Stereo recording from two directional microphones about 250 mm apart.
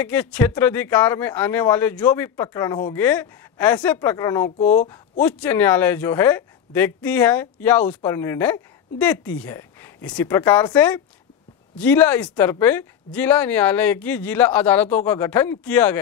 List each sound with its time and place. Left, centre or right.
0.0 s speech: centre
4.6 s speech: left
5.2 s speech: centre